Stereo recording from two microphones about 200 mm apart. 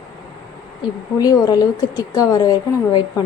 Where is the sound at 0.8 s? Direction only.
20° left (ahead or behind).